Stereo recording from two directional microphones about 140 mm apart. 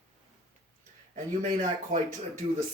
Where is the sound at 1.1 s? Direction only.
65° right (ahead or behind).